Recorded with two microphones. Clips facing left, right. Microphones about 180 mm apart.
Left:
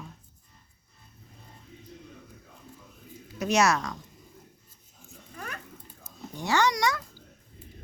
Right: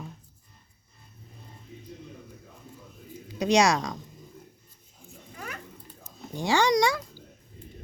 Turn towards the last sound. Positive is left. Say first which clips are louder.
# right 3 dB
turn(degrees=-15)  # may be behind; listen again after turning